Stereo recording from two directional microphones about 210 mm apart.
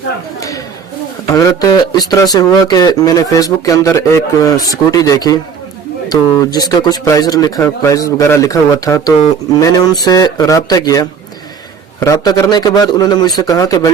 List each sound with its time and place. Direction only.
0.3 s speech: 15° left (ahead or behind)